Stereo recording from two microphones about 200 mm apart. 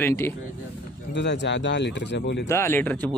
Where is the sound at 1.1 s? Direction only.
60° left (ahead or behind).